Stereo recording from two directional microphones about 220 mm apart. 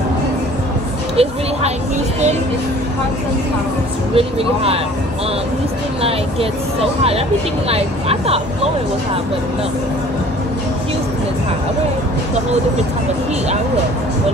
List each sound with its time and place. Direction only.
1.1 s speech: 25° right (ahead or behind)
4.1 s speech: 25° right (ahead or behind)
7.0 s speech: 25° right (ahead or behind)